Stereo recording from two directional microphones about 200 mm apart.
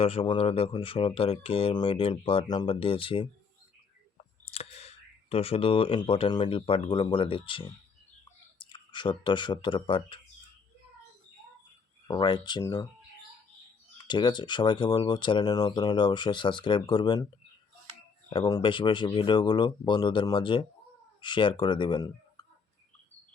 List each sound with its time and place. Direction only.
0.0 s speech: 30° left (ahead or behind)
4.5 s speech: 30° left (ahead or behind)
8.7 s speech: 25° left (ahead or behind)
12.0 s speech: 25° left (ahead or behind)
14.0 s speech: 20° left (ahead or behind)
18.3 s speech: 20° left (ahead or behind)